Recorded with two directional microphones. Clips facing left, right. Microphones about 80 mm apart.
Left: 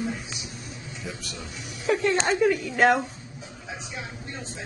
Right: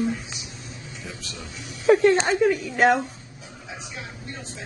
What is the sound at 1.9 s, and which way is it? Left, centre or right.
Speech, right.